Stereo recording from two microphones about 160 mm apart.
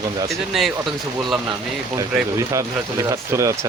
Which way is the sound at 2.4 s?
20° right (ahead or behind).